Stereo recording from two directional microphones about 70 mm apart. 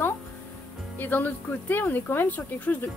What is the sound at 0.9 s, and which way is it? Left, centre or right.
A woman's voice, left.